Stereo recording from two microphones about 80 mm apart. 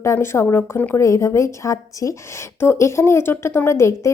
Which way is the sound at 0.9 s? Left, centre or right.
Left.